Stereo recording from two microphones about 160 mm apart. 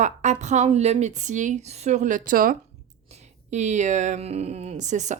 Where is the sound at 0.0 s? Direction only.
45° right (ahead or behind).